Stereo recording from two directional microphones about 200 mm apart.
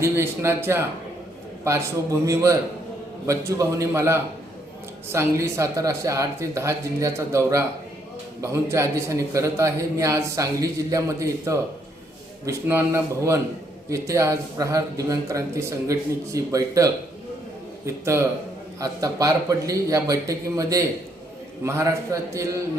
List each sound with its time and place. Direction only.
0.0 s a man's voice: 10° right (ahead or behind)